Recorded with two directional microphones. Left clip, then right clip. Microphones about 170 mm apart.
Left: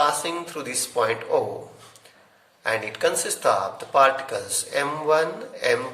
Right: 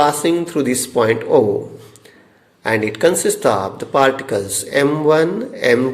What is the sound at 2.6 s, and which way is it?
Speech, 25° right (ahead or behind).